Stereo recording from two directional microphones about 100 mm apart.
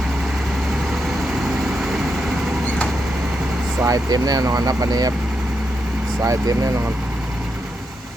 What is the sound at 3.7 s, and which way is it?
Speech, 30° right (ahead or behind).